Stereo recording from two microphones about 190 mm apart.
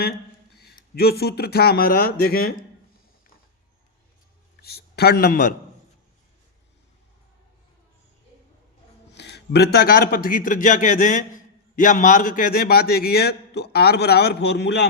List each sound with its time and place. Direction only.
0.6 s speech: 55° left (ahead or behind)
4.6 s a man's voice: 55° left (ahead or behind)
9.1 s a man's voice: 65° left (ahead or behind)